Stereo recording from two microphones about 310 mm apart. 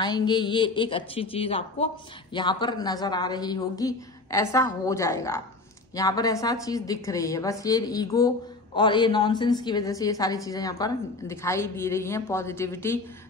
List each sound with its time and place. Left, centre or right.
0.0 s a woman's voice: centre